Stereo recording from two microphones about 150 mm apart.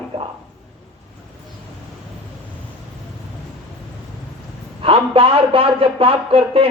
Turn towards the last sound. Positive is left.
turn(degrees=-40)  # may be behind; listen again after turning